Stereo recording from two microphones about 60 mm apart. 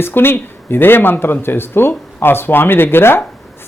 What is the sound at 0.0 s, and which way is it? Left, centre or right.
Speech, left.